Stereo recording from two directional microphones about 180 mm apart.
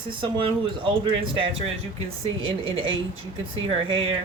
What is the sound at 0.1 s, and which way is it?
Speech, 30° right (ahead or behind).